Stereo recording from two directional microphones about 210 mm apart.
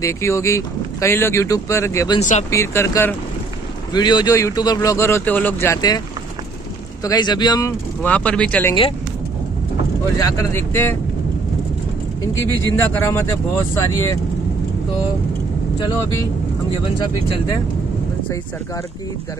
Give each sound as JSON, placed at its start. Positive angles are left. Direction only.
{"t": 0.0, "sound": "speech", "side_deg": 15}
{"t": 2.1, "sound": "speech", "side_deg": 35}
{"t": 2.5, "sound": "speech", "side_deg": 15}
{"t": 8.0, "sound": "speech", "side_deg": 5}
{"t": 10.1, "sound": "speech", "side_deg": 15}
{"t": 12.7, "sound": "speech", "side_deg": 10}